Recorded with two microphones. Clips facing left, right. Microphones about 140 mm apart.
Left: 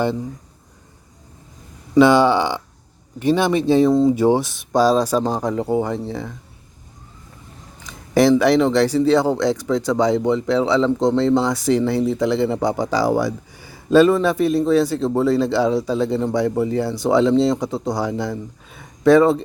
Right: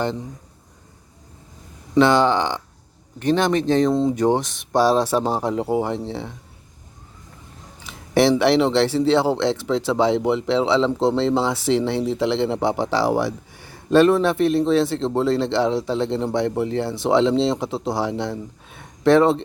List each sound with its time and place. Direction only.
2.0 s speech: 10° left (ahead or behind)
7.9 s speech: centre (ahead or behind)